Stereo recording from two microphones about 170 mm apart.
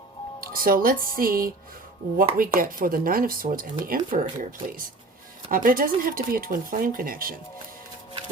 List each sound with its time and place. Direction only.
0.5 s speech: 55° right (ahead or behind)